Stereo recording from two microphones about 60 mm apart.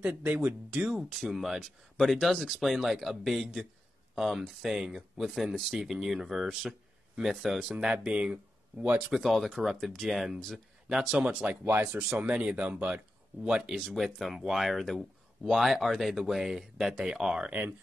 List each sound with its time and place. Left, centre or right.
0.0 s speech: right
0.9 s speech: centre
8.9 s speech: centre
11.6 s speech: right
12.2 s speech: right
13.8 s speech: centre